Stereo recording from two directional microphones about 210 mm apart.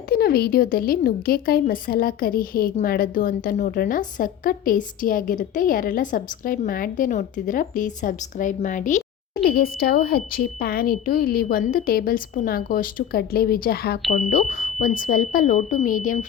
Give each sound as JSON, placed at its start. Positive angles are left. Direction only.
{"t": 0.1, "sound": "a woman's voice", "side_deg": 45}
{"t": 9.4, "sound": "a woman's voice", "side_deg": 50}